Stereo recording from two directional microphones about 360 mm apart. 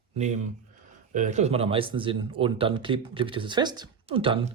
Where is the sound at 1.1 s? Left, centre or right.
Centre.